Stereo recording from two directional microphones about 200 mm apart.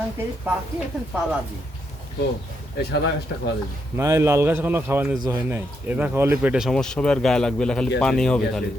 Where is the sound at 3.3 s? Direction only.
60° left (ahead or behind).